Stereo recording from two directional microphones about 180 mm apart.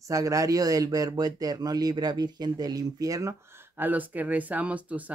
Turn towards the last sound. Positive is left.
turn(degrees=-10)  # may be behind; listen again after turning